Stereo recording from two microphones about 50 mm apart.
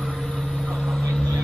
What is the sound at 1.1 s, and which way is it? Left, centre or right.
Vehicle, centre.